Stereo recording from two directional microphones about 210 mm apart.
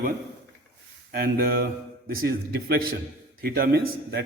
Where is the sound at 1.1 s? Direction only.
45° right (ahead or behind).